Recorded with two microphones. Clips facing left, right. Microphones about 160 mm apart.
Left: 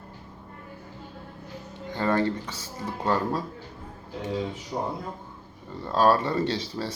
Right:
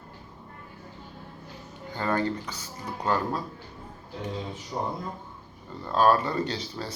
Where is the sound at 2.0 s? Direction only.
30° left (ahead or behind).